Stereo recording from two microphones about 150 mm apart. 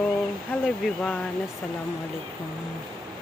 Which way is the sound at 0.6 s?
Centre (ahead or behind).